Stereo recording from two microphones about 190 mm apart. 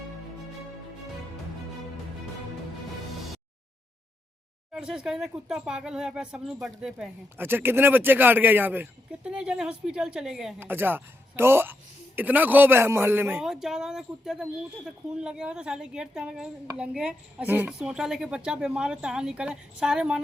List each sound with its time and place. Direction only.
4.7 s a woman's voice: 5° right (ahead or behind)